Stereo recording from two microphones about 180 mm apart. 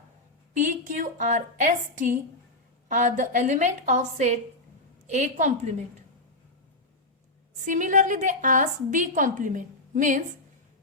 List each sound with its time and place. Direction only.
0.5 s a woman's voice: 45° right (ahead or behind)
7.6 s a woman's voice: 45° right (ahead or behind)